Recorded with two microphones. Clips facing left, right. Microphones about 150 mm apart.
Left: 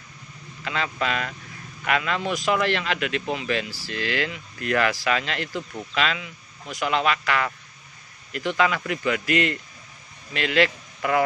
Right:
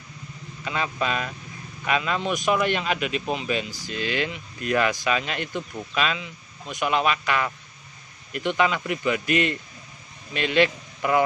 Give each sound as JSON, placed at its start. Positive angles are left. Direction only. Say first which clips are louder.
{"t": 0.7, "sound": "a man's voice", "louder": "even", "side_deg": -20}